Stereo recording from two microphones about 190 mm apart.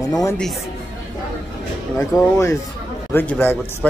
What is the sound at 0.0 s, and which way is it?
Speech, 15° left (ahead or behind).